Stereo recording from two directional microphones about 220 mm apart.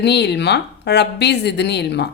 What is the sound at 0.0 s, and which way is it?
A woman's voice, 50° left (ahead or behind).